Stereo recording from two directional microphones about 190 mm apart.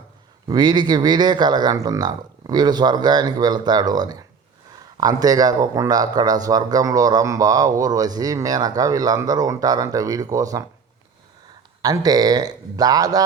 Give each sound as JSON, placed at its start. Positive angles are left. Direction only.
{"t": 0.4, "sound": "speech", "side_deg": -20}
{"t": 11.8, "sound": "speech", "side_deg": -20}